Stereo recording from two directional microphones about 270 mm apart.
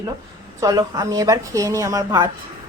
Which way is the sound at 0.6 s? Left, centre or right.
Centre.